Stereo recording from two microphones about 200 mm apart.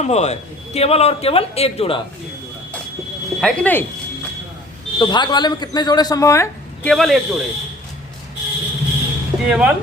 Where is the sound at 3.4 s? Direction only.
5° left (ahead or behind).